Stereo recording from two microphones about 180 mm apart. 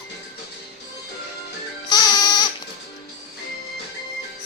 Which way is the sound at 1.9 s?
20° left (ahead or behind).